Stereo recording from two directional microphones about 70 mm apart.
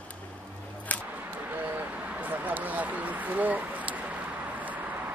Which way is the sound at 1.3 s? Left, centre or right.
Right.